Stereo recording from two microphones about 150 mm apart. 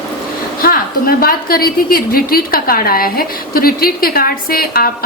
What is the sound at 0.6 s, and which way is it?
A woman's voice, 75° left (ahead or behind).